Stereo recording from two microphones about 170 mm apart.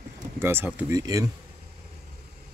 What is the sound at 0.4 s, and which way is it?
Speech, 15° right (ahead or behind).